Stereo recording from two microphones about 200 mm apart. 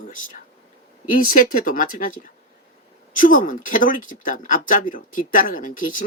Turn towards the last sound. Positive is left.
turn(degrees=40)  # may be behind; listen again after turning